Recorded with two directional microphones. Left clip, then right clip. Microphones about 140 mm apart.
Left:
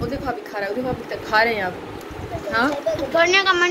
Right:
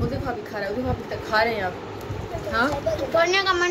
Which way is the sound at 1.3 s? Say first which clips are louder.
Left 4 dB; 40° left (ahead or behind).